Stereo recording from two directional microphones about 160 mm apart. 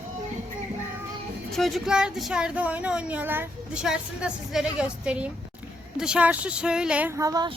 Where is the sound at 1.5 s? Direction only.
Centre (ahead or behind).